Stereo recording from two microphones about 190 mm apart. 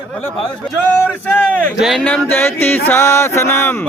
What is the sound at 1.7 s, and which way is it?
Speech, centre (ahead or behind).